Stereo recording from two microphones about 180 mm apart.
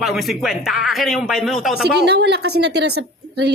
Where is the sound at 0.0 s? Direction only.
Centre (ahead or behind).